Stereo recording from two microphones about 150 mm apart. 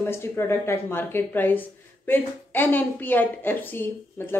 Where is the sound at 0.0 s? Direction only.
15° left (ahead or behind).